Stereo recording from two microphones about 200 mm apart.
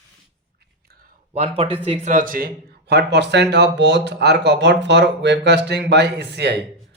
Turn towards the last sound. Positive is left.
turn(degrees=-55)  # may be behind; listen again after turning